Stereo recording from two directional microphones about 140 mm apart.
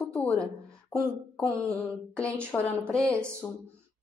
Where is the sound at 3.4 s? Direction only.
25° left (ahead or behind).